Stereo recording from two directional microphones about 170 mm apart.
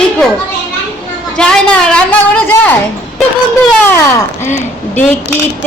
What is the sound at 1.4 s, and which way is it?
Speech, 5° left (ahead or behind).